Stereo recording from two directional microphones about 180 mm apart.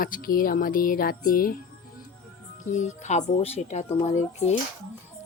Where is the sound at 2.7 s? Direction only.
40° left (ahead or behind).